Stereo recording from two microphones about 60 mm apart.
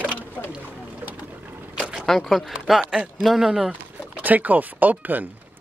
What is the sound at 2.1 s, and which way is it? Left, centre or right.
Speech, centre.